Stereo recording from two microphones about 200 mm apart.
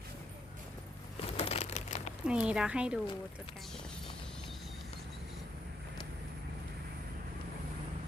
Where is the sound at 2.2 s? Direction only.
5° right (ahead or behind).